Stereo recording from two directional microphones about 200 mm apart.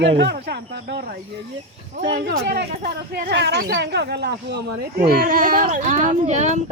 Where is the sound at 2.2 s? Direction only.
55° right (ahead or behind).